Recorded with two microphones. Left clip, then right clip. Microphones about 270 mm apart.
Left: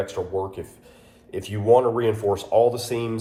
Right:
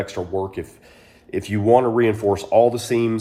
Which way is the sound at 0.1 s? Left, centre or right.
Right.